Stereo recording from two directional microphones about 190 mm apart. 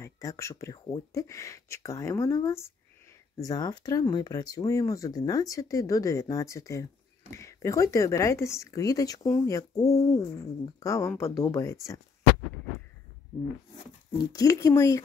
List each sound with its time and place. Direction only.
0.0 s speech: 15° left (ahead or behind)
14.1 s speech: 20° left (ahead or behind)